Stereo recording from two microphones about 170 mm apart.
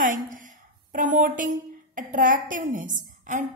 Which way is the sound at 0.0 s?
50° right (ahead or behind).